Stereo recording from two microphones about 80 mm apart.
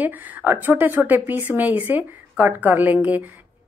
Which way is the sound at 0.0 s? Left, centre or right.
Right.